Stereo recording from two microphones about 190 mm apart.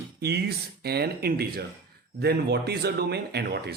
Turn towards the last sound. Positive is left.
turn(degrees=-55)  # may be behind; listen again after turning